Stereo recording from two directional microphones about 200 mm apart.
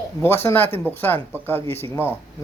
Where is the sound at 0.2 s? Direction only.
10° left (ahead or behind).